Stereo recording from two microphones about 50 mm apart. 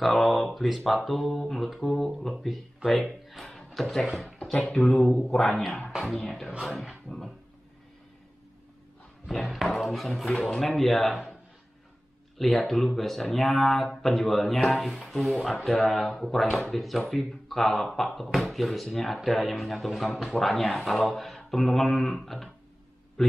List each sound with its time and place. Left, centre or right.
0.0 s speech: centre
3.1 s a sound: centre
4.9 s speech: centre
9.3 s speech: centre
10.5 s speech: centre
10.8 s speech: centre
12.4 s speech: centre